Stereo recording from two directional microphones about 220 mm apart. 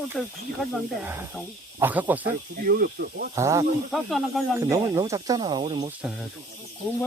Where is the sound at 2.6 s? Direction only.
40° right (ahead or behind).